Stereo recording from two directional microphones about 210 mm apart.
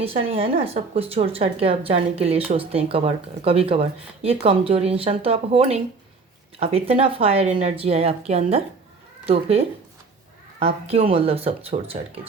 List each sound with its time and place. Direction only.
0.0 s a woman's voice: 25° right (ahead or behind)